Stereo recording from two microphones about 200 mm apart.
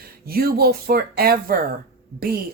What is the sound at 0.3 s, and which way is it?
Speech, 50° right (ahead or behind).